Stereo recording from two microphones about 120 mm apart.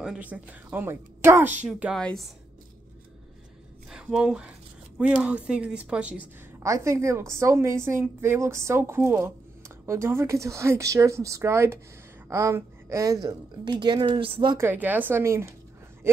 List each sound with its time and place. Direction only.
0.0 s speech: 10° right (ahead or behind)
1.6 s speech: 10° right (ahead or behind)
2.0 s speech: 5° left (ahead or behind)
3.9 s speech: 5° right (ahead or behind)
6.6 s a woman's voice: 25° right (ahead or behind); by 14.6 s 45° right (ahead or behind)
14.6 s speech: 15° right (ahead or behind)